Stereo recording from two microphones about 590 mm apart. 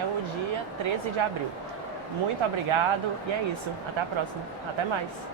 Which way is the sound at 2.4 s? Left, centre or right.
Right.